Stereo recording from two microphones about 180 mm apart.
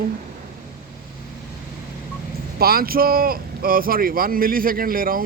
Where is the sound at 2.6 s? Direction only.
55° right (ahead or behind).